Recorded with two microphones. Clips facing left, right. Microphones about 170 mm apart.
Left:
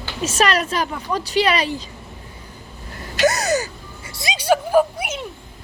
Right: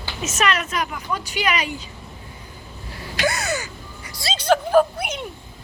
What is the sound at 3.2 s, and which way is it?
Gasp, 40° left (ahead or behind).